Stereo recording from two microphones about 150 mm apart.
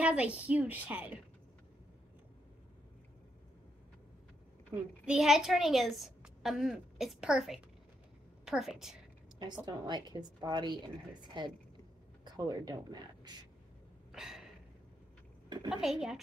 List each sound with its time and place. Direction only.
0.0 s a woman's voice: 10° right (ahead or behind)
4.7 s a woman's voice: 5° right (ahead or behind)
9.7 s a woman's voice: 30° right (ahead or behind)
14.1 s a sound: centre (ahead or behind)
15.7 s a woman's voice: 5° right (ahead or behind)